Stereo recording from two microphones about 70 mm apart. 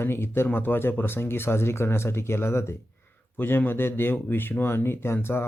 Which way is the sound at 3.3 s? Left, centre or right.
Left.